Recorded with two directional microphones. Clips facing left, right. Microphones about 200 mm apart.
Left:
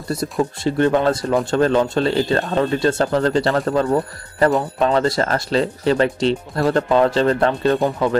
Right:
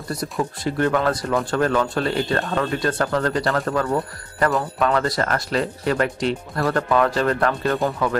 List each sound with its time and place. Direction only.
0.1 s speech: 25° left (ahead or behind)